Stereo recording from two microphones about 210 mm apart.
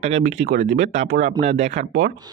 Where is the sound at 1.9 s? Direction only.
45° right (ahead or behind).